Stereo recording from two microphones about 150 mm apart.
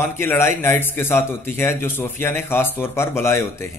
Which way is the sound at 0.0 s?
15° left (ahead or behind).